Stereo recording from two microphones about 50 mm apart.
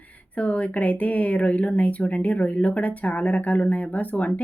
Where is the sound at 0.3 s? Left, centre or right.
Left.